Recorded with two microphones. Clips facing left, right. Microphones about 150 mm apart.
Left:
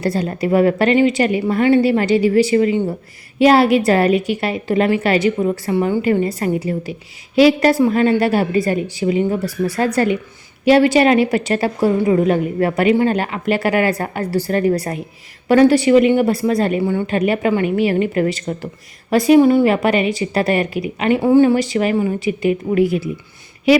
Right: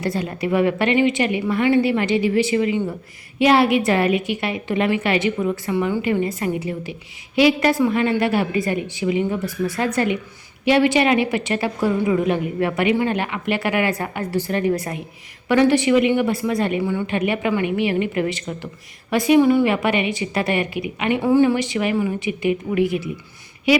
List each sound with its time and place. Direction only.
0.0 s a woman's voice: 35° left (ahead or behind)